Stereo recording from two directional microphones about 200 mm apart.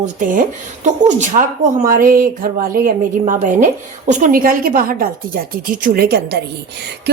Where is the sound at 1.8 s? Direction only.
45° right (ahead or behind).